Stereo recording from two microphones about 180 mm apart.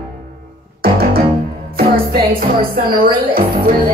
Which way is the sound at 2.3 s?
55° right (ahead or behind).